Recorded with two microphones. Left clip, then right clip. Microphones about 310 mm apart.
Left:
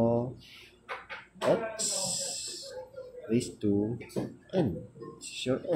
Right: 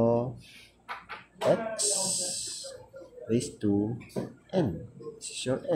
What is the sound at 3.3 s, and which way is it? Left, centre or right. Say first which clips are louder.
Speech: right 1 dB; centre.